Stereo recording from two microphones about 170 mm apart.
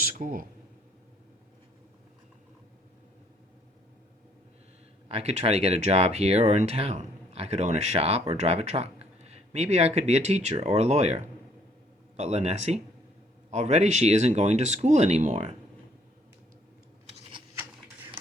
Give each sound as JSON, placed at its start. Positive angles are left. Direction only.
{"t": 0.0, "sound": "speech", "side_deg": -55}
{"t": 5.0, "sound": "speech", "side_deg": -40}